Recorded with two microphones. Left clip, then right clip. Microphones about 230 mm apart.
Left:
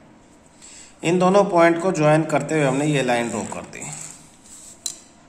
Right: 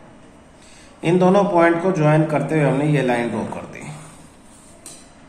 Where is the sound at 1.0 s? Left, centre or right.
Left.